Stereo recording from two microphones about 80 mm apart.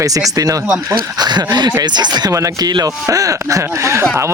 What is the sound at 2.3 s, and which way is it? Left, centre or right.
Speech, right.